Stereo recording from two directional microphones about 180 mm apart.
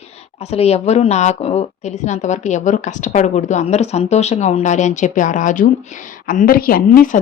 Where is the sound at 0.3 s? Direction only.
35° left (ahead or behind).